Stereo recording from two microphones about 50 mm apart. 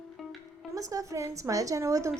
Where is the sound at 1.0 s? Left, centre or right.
Right.